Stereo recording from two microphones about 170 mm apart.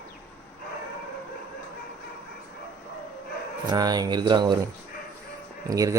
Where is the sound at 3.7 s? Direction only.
25° right (ahead or behind).